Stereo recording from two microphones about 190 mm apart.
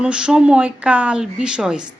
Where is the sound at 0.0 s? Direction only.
5° right (ahead or behind).